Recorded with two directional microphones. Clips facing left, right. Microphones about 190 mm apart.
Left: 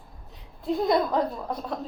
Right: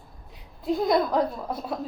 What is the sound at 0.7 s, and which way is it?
A woman's voice, centre (ahead or behind).